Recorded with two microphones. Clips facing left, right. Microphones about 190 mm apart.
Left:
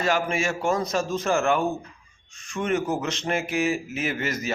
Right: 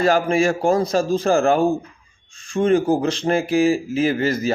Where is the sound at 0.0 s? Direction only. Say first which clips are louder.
Right 7 dB; 35° right (ahead or behind).